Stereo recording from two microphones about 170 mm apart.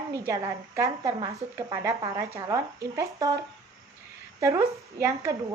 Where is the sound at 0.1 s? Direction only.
15° right (ahead or behind).